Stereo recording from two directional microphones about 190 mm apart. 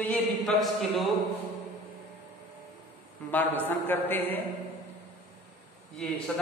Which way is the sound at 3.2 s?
10° left (ahead or behind).